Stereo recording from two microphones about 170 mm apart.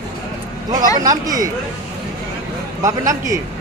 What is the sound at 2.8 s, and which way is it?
Speech, 20° right (ahead or behind).